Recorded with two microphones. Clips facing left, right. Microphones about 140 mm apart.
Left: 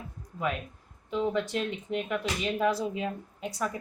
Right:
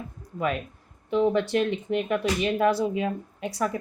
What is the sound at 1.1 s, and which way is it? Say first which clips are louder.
Speech: right 6 dB; 65° right (ahead or behind).